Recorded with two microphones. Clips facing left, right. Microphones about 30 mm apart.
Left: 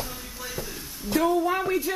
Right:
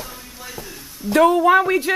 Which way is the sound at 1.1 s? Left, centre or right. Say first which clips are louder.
Right 9 dB; right.